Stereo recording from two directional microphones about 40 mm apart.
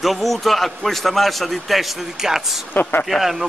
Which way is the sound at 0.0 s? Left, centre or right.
Centre.